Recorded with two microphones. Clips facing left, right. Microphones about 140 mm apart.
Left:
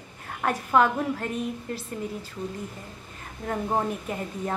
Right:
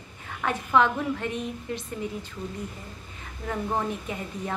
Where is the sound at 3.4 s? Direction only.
50° left (ahead or behind).